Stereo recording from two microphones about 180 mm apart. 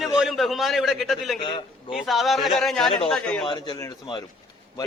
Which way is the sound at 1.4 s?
25° left (ahead or behind).